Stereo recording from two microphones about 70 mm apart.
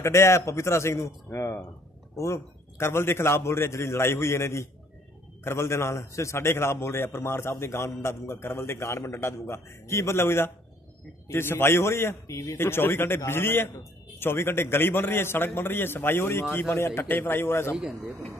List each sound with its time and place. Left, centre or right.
0.0 s a man's voice: left
17.7 s speech: centre